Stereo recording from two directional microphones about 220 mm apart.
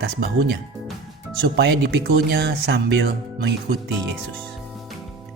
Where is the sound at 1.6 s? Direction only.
50° right (ahead or behind).